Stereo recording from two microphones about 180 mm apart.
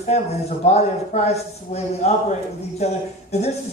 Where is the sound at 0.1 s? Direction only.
35° left (ahead or behind).